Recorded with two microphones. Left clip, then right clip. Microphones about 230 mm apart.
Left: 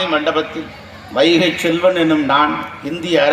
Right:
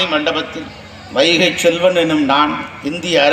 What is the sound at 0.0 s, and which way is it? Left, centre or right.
A man's voice, right.